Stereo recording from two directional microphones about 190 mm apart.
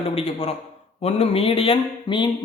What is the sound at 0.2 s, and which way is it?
A man's voice, 30° left (ahead or behind).